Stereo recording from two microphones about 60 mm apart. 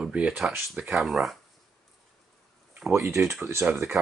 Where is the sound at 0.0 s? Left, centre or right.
Centre.